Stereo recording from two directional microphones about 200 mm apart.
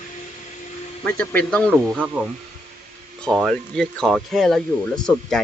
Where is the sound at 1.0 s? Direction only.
5° left (ahead or behind).